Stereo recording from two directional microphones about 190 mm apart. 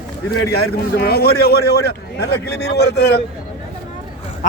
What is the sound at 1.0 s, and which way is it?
A man's voice, 55° left (ahead or behind).